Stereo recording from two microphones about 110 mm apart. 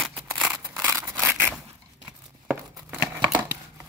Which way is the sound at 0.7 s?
25° right (ahead or behind).